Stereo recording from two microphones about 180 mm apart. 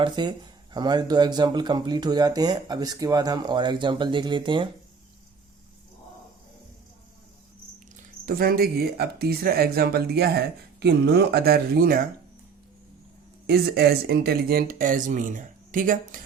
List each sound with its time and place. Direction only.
0.0 s speech: 25° right (ahead or behind)
8.2 s speech: 55° right (ahead or behind)
13.5 s speech: 60° right (ahead or behind)